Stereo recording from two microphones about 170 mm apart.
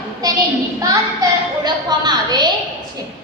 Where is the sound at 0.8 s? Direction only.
20° right (ahead or behind).